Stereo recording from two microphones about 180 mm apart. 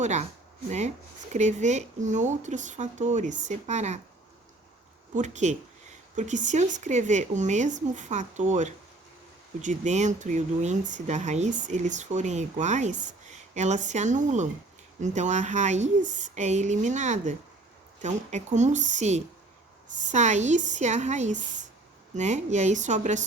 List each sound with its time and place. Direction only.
0.0 s speech: 40° right (ahead or behind)
1.3 s speech: 40° right (ahead or behind)
5.1 s speech: 40° right (ahead or behind)